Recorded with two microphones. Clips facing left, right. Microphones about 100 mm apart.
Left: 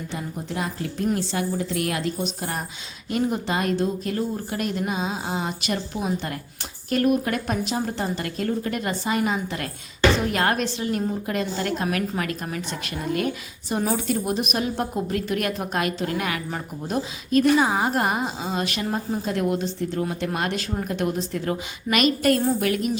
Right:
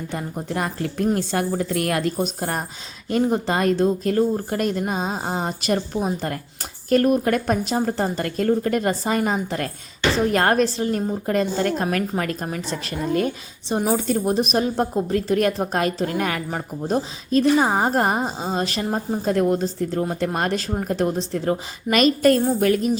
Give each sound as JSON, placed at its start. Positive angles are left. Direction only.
{"t": 0.1, "sound": "a woman's voice", "side_deg": -50}